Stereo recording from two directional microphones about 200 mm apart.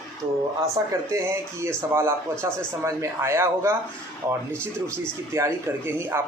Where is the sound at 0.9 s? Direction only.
15° right (ahead or behind).